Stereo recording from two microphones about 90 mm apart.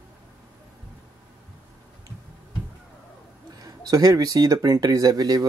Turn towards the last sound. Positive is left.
turn(degrees=-45)  # may be behind; listen again after turning